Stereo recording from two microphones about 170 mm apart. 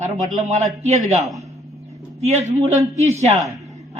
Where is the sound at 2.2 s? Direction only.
40° right (ahead or behind).